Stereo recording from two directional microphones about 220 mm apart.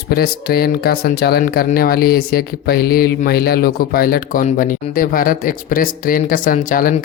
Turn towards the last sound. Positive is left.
turn(degrees=40)  # may be behind; listen again after turning